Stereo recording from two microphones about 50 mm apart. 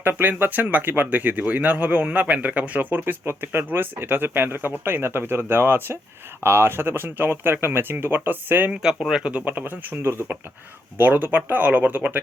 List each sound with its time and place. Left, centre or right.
0.0 s speech: right
3.2 s speech: right
3.6 s speech: right
8.7 s speech: centre
9.2 s speech: right